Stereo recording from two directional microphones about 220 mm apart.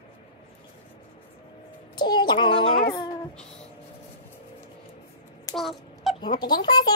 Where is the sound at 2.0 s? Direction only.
20° left (ahead or behind).